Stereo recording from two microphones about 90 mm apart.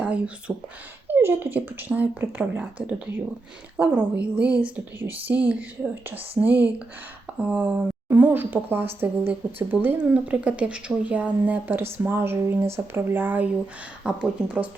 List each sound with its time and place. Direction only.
0.0 s speech: 10° right (ahead or behind)
1.0 s a woman's voice: 25° right (ahead or behind)
3.8 s a woman's voice: 15° right (ahead or behind)
14.0 s speech: 10° right (ahead or behind)